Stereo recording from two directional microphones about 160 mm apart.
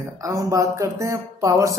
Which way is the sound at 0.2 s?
20° right (ahead or behind).